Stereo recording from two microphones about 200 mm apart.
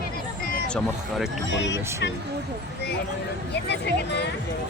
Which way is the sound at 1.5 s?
65° left (ahead or behind).